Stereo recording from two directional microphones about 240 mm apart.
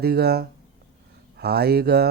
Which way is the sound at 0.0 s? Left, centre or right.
Right.